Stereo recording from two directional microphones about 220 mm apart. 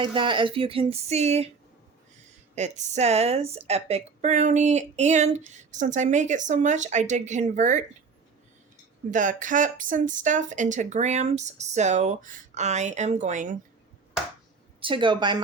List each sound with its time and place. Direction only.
0.0 s speech: 20° right (ahead or behind)
2.6 s a woman's voice: 30° right (ahead or behind)
9.0 s a woman's voice: 35° right (ahead or behind)
14.8 s speech: 25° right (ahead or behind)